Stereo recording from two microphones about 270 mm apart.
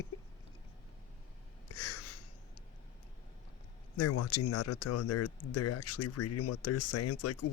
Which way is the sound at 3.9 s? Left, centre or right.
Left.